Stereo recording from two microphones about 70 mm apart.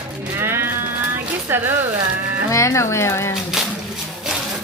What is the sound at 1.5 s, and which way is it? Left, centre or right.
Speech, right.